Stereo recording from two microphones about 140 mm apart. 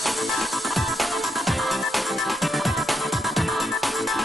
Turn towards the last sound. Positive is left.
turn(degrees=0)  # may be behind; listen again after turning